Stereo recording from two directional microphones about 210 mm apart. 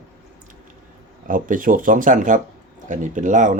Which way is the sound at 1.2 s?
40° right (ahead or behind).